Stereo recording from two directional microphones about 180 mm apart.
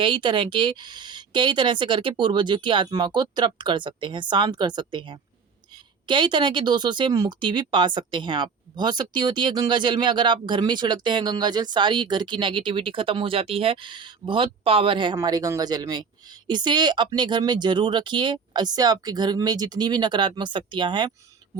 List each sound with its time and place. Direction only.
0.0 s speech: 25° right (ahead or behind)